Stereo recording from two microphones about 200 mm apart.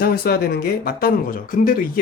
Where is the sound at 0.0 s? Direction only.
50° left (ahead or behind).